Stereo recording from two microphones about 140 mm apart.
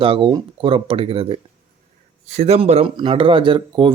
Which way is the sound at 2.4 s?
50° right (ahead or behind).